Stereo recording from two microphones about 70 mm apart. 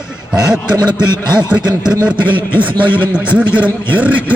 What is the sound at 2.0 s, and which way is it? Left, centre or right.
A man's voice, centre.